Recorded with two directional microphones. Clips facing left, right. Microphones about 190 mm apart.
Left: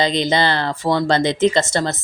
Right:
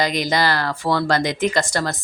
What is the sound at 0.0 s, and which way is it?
Speech, 25° left (ahead or behind).